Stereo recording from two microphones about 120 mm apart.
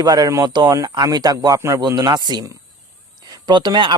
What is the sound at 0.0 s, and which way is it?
Speech, 30° right (ahead or behind).